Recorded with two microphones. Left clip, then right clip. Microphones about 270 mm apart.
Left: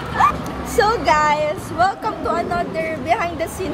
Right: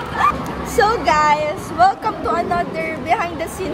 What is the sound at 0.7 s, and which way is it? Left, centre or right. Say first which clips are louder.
Speech: right 1 dB; centre.